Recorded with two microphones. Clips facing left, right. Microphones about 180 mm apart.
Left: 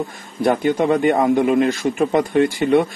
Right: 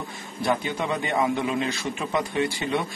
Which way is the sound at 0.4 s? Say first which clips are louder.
Left 9 dB; 55° left (ahead or behind).